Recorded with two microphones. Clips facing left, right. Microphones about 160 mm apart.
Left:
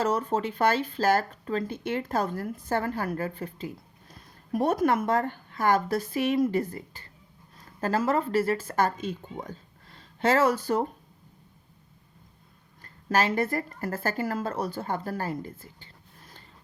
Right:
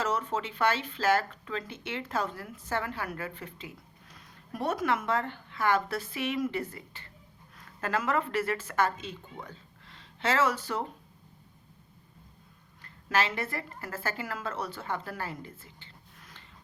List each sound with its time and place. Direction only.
0.0 s speech: 35° left (ahead or behind)
12.8 s speech: 40° left (ahead or behind)